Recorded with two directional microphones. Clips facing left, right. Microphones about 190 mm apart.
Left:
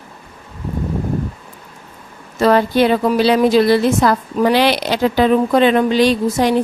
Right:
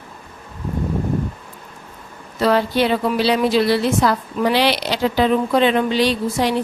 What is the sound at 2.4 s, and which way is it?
A woman's voice, 50° left (ahead or behind).